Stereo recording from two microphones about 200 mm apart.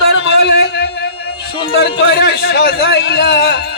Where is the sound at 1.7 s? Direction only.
55° left (ahead or behind).